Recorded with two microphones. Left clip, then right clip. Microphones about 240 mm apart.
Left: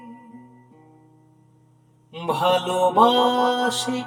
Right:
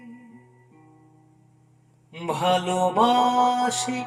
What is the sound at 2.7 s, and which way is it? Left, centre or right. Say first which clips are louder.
Music: left 4 dB; left.